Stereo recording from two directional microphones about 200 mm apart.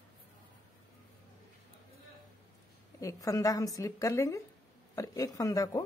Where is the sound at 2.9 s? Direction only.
15° left (ahead or behind).